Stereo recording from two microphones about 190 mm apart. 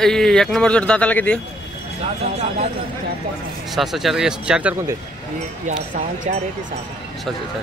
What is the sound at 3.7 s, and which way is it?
A man's voice, centre (ahead or behind).